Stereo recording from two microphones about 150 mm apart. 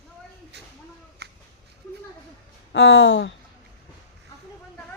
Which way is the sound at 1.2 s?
90° right.